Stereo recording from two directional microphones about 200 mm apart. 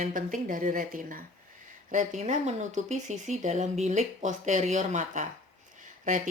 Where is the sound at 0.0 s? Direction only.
40° right (ahead or behind).